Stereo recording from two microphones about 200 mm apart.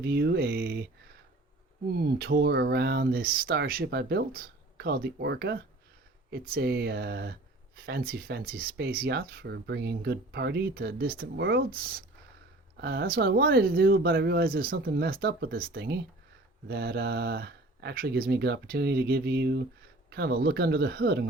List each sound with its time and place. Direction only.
0.0 s speech: 50° right (ahead or behind)
1.9 s speech: 50° right (ahead or behind)